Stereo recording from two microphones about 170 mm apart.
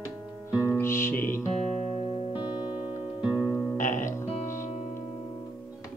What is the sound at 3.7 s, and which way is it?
Music, 45° left (ahead or behind).